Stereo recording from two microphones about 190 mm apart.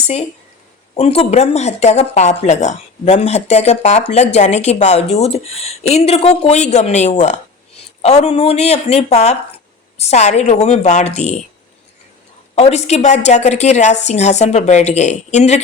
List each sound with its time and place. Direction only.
0.9 s speech: 30° left (ahead or behind)
12.5 s speech: 35° left (ahead or behind)